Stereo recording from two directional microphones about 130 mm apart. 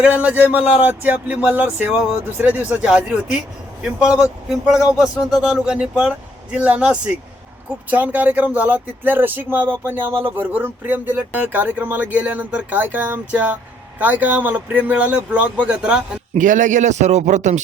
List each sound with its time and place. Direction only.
0.0 s speech: 10° right (ahead or behind)
16.3 s a man's voice: 75° right (ahead or behind)